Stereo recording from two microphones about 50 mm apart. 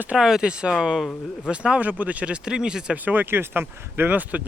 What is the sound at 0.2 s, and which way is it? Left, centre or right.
Speech, centre.